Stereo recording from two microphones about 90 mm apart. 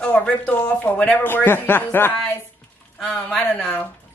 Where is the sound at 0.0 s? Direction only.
15° left (ahead or behind).